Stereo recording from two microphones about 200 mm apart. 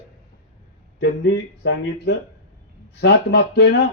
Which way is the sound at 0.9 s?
55° left (ahead or behind).